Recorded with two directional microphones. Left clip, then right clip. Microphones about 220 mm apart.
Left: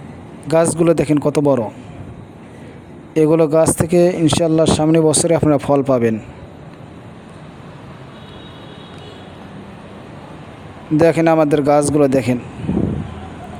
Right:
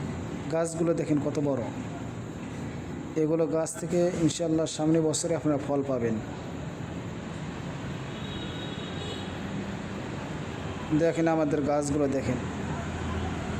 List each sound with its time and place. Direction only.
0.4 s speech: 40° left (ahead or behind)
3.2 s speech: 40° left (ahead or behind)
10.9 s speech: 40° left (ahead or behind)